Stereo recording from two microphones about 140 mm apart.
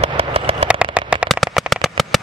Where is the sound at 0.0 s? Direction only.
45° right (ahead or behind).